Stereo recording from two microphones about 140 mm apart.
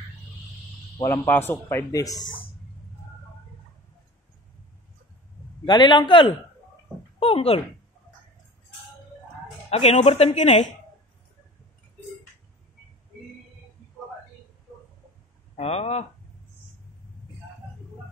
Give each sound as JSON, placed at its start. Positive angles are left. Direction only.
{"t": 0.9, "sound": "a man's voice", "side_deg": 25}
{"t": 5.7, "sound": "a man's voice", "side_deg": 35}
{"t": 9.7, "sound": "speech", "side_deg": 45}
{"t": 15.5, "sound": "speech", "side_deg": 45}